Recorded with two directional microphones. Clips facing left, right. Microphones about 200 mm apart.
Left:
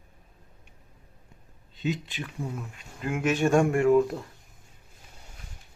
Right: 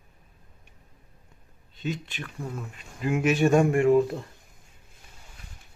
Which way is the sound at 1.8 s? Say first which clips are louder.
Left 2 dB; 15° left (ahead or behind).